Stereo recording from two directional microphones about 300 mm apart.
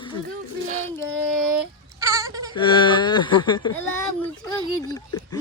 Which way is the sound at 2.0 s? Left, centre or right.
Centre.